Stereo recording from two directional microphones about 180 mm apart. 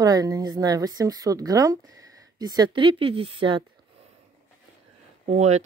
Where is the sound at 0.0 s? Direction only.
20° right (ahead or behind).